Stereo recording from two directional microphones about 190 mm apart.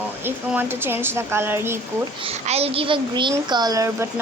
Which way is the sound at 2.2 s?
35° right (ahead or behind).